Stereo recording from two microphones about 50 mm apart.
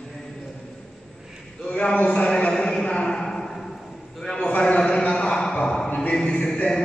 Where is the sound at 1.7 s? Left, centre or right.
Left.